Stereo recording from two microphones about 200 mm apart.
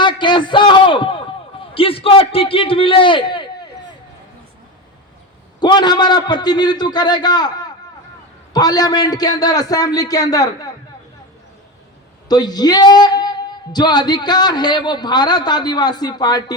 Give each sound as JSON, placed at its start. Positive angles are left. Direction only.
{"t": 0.0, "sound": "a sound", "side_deg": 25}
{"t": 5.5, "sound": "a man's voice", "side_deg": 20}
{"t": 12.3, "sound": "a man's voice", "side_deg": 20}